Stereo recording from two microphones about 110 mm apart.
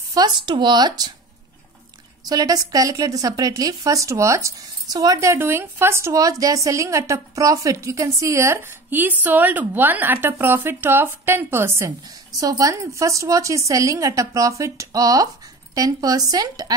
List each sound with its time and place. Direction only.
0.1 s a woman's voice: 40° right (ahead or behind)
2.2 s a woman's voice: 35° right (ahead or behind)